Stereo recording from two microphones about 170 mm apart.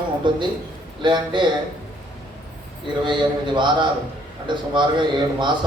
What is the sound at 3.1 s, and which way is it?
A man's voice, 25° right (ahead or behind).